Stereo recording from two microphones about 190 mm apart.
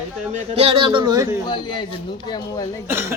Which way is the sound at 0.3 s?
30° right (ahead or behind).